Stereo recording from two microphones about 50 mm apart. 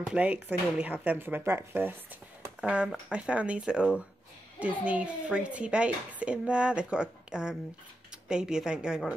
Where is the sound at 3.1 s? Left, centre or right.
Right.